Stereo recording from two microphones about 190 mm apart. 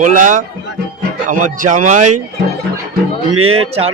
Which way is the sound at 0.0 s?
40° right (ahead or behind).